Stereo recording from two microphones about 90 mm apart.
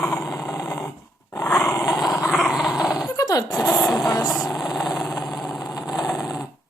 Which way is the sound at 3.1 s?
45° left (ahead or behind).